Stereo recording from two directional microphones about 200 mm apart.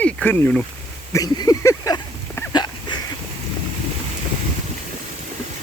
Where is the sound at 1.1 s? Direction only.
20° left (ahead or behind).